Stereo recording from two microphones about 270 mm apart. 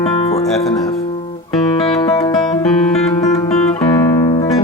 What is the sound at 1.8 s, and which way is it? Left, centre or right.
Music, centre.